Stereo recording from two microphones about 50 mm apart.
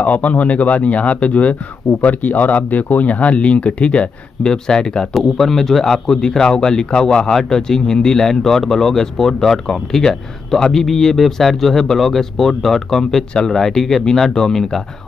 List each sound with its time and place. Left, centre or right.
0.0 s speech: left; by 14.8 s centre